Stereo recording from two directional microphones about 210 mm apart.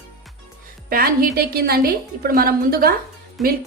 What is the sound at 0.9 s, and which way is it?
A woman's voice, 45° right (ahead or behind).